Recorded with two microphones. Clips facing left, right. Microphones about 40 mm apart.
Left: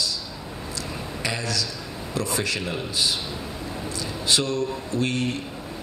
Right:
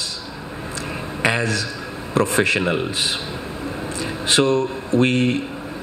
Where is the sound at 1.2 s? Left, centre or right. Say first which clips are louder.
Right 8 dB; right.